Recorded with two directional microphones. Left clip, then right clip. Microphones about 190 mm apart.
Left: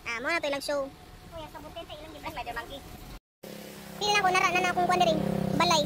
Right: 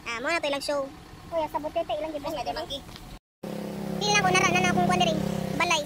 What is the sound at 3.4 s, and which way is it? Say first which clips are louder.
Vehicle: right 9 dB; 20° right (ahead or behind).